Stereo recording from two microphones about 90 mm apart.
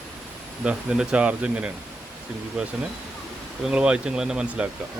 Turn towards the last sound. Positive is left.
turn(degrees=-10)  # may be behind; listen again after turning